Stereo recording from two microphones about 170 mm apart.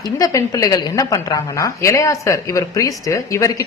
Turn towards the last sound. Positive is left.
turn(degrees=20)  # may be behind; listen again after turning